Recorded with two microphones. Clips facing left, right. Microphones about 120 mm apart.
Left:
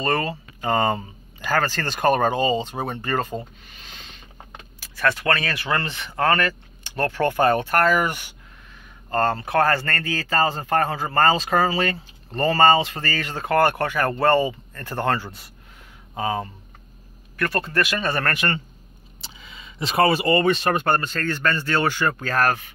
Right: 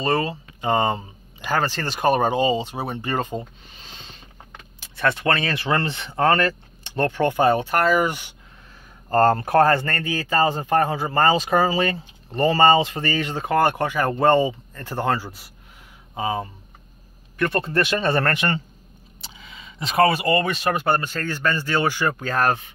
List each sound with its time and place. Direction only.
0.0 s speech: 15° right (ahead or behind)
7.1 s speech: 15° right (ahead or behind)
9.1 s speech: 45° right (ahead or behind)
9.6 s speech: 20° right (ahead or behind)
17.4 s speech: 25° right (ahead or behind)
19.2 s speech: centre (ahead or behind); by 22.6 s 20° right (ahead or behind)